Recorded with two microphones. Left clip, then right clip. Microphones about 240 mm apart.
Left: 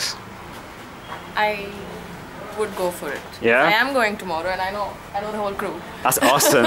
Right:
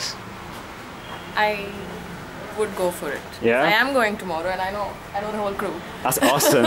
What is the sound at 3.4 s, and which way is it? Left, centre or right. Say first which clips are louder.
Speech: left 2 dB; centre.